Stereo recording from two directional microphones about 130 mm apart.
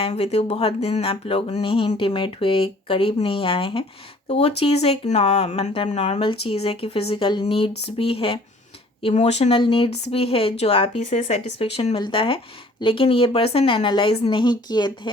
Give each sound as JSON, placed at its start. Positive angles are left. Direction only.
{"t": 0.0, "sound": "speech", "side_deg": 50}
{"t": 6.2, "sound": "speech", "side_deg": 45}